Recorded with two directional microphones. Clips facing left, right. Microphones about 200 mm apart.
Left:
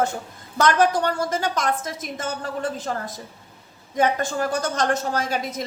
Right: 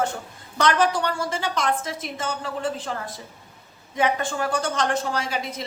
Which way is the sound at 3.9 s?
40° left (ahead or behind).